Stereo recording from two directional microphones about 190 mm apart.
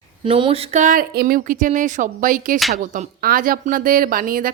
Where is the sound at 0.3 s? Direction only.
25° right (ahead or behind).